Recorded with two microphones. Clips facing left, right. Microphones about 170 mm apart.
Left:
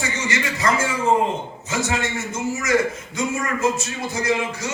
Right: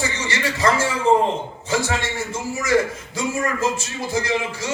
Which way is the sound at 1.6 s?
30° right (ahead or behind).